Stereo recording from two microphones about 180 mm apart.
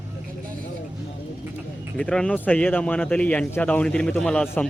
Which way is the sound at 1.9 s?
5° left (ahead or behind).